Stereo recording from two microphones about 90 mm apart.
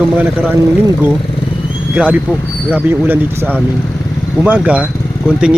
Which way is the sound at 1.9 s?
15° right (ahead or behind).